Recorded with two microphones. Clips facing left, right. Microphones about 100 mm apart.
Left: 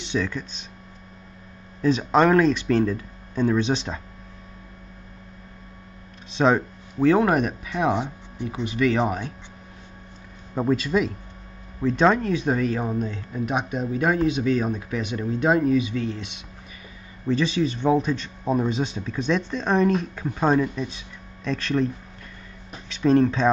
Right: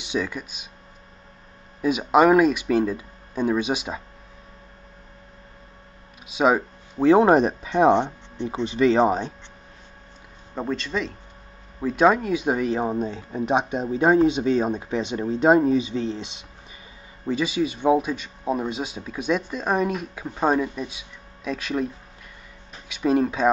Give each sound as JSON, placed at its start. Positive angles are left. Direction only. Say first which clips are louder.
{"t": 0.0, "sound": "speech", "louder": "left 1 dB", "side_deg": -10}
{"t": 1.8, "sound": "speech", "louder": "right 1 dB", "side_deg": -10}
{"t": 6.3, "sound": "speech", "louder": "even", "side_deg": -5}
{"t": 7.1, "sound": "speech", "louder": "right 4 dB", "side_deg": -25}
{"t": 10.5, "sound": "speech", "louder": "left 5 dB", "side_deg": 5}
{"t": 11.8, "sound": "speech", "louder": "right 1 dB", "side_deg": -10}
{"t": 17.3, "sound": "speech", "louder": "left 1 dB", "side_deg": -10}